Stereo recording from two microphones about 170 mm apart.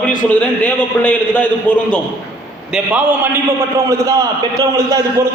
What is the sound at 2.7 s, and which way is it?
A man's voice, 5° right (ahead or behind).